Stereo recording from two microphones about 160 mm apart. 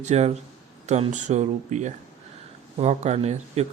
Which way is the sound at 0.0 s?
45° right (ahead or behind).